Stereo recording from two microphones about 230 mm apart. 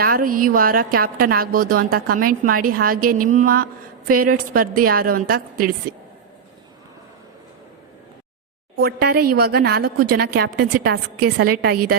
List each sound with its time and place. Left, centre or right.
0.0 s a woman's voice: right
8.7 s a woman's voice: right